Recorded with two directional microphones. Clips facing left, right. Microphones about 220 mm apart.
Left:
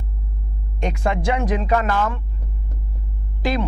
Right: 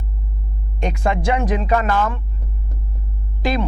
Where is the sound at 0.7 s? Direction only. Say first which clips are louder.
Right 1 dB; 10° right (ahead or behind).